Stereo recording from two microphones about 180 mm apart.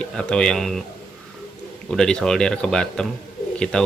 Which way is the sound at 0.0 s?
5° left (ahead or behind).